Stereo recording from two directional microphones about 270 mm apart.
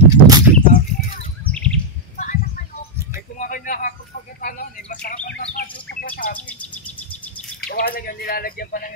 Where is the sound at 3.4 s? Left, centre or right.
Left.